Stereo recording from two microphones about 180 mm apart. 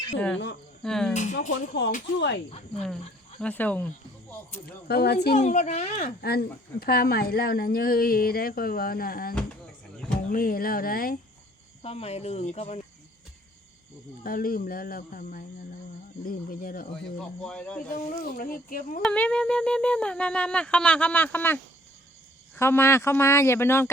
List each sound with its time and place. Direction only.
0.8 s speech: 5° left (ahead or behind)
1.1 s speech: 40° left (ahead or behind)
2.1 s speech: 70° left (ahead or behind)
2.5 s speech: 35° left (ahead or behind)
3.4 s speech: 10° left (ahead or behind)
4.6 s speech: 60° left (ahead or behind)
5.4 s speech: 40° left (ahead or behind)
6.2 s speech: 60° left (ahead or behind)
11.8 s speech: 35° left (ahead or behind)
14.3 s speech: 55° left (ahead or behind)
17.2 s speech: 5° left (ahead or behind)
17.9 s speech: 50° left (ahead or behind)
19.0 s speech: 5° left (ahead or behind)